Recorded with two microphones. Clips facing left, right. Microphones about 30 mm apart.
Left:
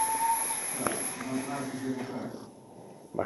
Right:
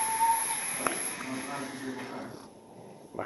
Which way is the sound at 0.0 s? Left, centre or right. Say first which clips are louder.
Right 1 dB; centre.